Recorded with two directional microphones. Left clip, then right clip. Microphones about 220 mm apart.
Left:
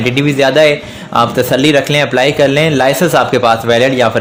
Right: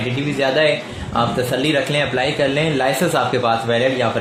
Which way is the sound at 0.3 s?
35° left (ahead or behind).